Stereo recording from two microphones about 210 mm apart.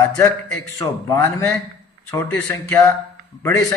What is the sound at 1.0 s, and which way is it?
Speech, 15° left (ahead or behind).